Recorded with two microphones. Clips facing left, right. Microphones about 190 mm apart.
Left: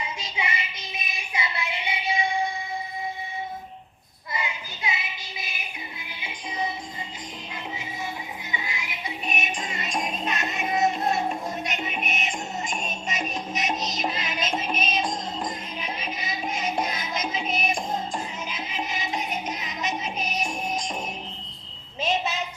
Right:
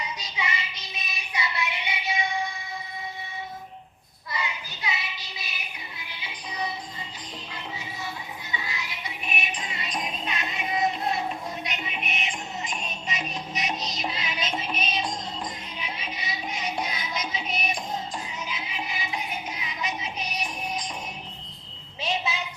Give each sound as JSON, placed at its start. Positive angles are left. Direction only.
{"t": 0.0, "sound": "music", "side_deg": 30}
{"t": 0.9, "sound": "child singing", "side_deg": 25}
{"t": 4.3, "sound": "a sound", "side_deg": 25}
{"t": 6.0, "sound": "music", "side_deg": 25}
{"t": 8.5, "sound": "music", "side_deg": 25}
{"t": 9.2, "sound": "music", "side_deg": 45}
{"t": 22.0, "sound": "a sound", "side_deg": 45}